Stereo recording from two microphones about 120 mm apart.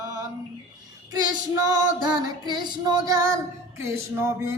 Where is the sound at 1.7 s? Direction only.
35° right (ahead or behind).